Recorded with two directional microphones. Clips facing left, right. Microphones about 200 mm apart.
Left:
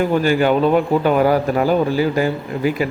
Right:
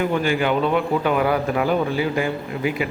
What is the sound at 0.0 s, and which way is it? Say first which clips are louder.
Speech: left 5 dB; 40° left (ahead or behind).